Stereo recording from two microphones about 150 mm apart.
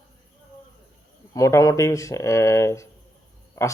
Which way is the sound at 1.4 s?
20° left (ahead or behind).